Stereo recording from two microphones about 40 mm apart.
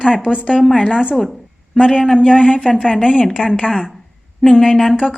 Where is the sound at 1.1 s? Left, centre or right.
Centre.